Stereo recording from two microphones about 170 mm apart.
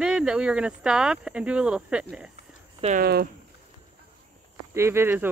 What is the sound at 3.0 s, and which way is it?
Speech, 70° right (ahead or behind).